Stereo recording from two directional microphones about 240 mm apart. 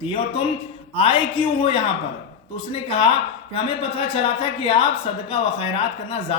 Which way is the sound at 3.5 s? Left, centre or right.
Left.